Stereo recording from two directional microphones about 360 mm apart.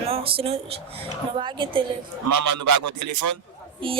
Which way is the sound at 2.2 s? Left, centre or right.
Right.